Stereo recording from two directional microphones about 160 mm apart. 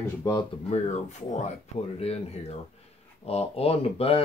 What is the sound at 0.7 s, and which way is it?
Speech, 45° left (ahead or behind).